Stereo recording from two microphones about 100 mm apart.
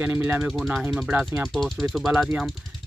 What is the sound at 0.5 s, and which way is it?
Speech, 5° right (ahead or behind).